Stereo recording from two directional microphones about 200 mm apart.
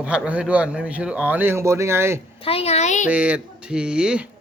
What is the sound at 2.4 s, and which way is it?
Speech, 30° left (ahead or behind).